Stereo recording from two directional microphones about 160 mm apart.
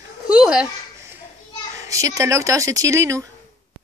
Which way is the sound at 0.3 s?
5° right (ahead or behind).